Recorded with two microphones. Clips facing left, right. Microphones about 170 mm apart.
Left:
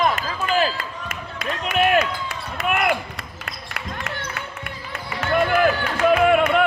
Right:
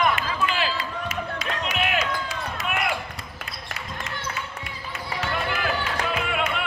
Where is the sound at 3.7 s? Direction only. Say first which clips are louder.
Left 5 dB; 60° left (ahead or behind).